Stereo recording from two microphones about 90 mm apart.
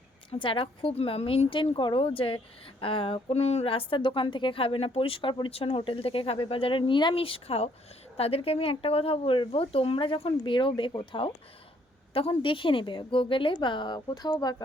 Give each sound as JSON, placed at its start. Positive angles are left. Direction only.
{"t": 0.3, "sound": "a woman's voice", "side_deg": 75}
{"t": 12.1, "sound": "a woman's voice", "side_deg": 90}